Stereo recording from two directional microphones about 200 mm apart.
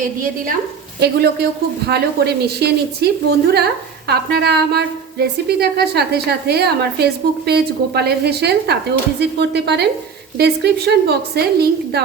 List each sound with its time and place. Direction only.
0.0 s a woman's voice: 40° right (ahead or behind)
0.9 s a woman's voice: 55° right (ahead or behind)